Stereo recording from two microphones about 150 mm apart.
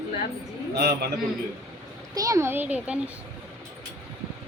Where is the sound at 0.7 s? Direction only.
90° right.